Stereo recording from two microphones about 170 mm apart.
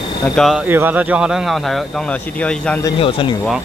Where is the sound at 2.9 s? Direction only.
30° left (ahead or behind).